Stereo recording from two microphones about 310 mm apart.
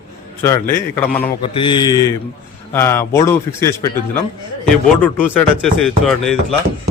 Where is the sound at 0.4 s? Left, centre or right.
Centre.